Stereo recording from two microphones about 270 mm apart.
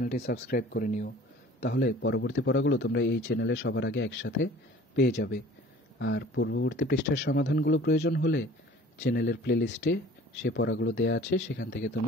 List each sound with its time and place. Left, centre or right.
0.0 s speech: left